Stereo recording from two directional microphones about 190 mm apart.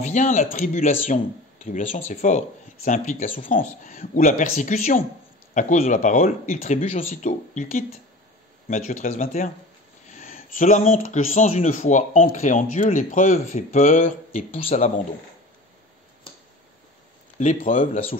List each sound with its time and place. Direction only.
0.0 s speech: 40° left (ahead or behind)
17.4 s speech: 40° left (ahead or behind)